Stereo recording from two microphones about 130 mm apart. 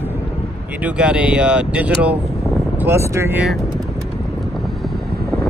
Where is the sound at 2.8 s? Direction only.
20° right (ahead or behind).